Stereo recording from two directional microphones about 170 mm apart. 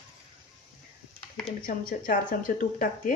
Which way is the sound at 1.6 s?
55° left (ahead or behind).